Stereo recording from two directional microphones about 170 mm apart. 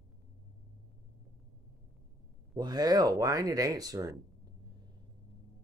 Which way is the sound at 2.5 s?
25° right (ahead or behind).